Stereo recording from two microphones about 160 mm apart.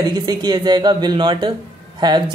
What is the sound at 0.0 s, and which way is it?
Speech, 25° right (ahead or behind).